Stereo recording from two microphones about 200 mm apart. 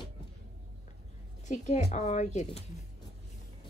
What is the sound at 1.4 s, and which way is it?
Speech, 35° left (ahead or behind).